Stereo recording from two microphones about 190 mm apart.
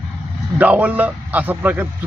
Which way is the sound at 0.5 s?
5° right (ahead or behind).